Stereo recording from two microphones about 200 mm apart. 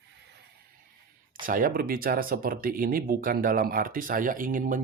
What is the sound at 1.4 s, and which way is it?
Speech, 45° right (ahead or behind).